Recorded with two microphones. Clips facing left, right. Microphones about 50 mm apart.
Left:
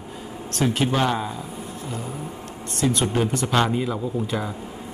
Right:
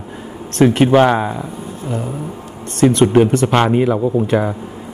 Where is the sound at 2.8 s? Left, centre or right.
Right.